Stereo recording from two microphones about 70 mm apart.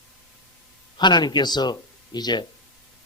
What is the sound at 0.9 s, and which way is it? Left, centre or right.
A man's voice, left.